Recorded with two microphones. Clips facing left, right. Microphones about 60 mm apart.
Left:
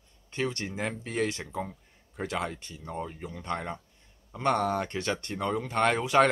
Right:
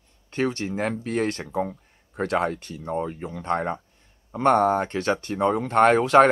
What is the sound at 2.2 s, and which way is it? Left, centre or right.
Speech, right.